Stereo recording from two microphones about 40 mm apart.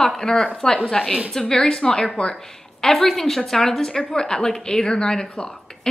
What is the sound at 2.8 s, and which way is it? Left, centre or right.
A woman's voice, centre.